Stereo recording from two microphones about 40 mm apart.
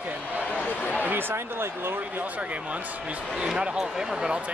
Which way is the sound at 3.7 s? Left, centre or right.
Centre.